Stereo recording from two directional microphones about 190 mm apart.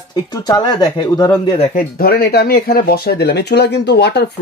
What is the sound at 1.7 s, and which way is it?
Speech, 50° left (ahead or behind).